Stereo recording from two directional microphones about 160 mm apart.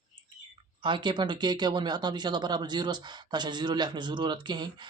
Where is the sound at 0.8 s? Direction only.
30° right (ahead or behind).